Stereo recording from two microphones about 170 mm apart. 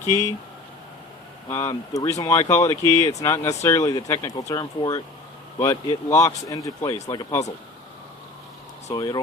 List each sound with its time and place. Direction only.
1.5 s speech: 15° left (ahead or behind)
8.9 s speech: 25° left (ahead or behind)